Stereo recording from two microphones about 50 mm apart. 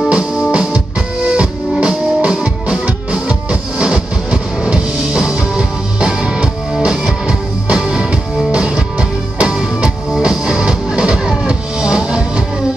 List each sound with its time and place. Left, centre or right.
0.1 s music: centre